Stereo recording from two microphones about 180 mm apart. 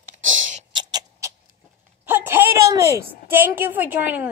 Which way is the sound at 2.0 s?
10° right (ahead or behind).